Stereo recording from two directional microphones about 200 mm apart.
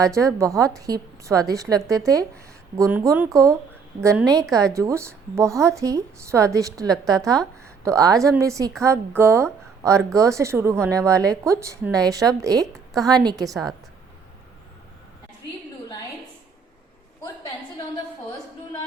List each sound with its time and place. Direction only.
0.0 s a woman's voice: 15° right (ahead or behind)
12.5 s a woman's voice: centre (ahead or behind)
13.0 s a woman's voice: 20° right (ahead or behind)